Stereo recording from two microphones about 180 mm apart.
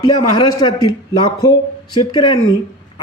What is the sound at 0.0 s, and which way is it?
A man's voice, 20° left (ahead or behind).